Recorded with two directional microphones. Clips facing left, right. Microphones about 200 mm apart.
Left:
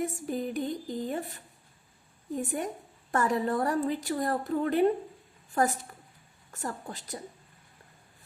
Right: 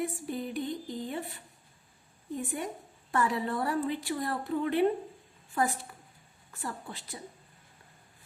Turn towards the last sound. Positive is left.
turn(degrees=40)  # may be behind; listen again after turning